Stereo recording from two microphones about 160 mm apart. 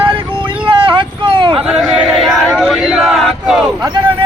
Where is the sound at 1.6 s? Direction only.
5° right (ahead or behind).